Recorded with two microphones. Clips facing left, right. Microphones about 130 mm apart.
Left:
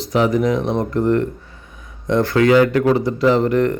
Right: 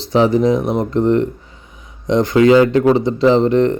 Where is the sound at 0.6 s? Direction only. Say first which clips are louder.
Right 2 dB; 10° right (ahead or behind).